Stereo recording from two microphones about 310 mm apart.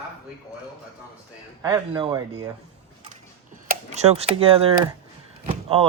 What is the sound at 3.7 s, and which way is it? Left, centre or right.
Speech, right.